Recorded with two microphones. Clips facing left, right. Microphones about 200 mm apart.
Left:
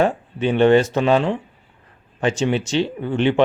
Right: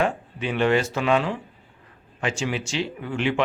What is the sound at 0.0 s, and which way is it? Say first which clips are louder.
Speech: left 6 dB; 30° left (ahead or behind).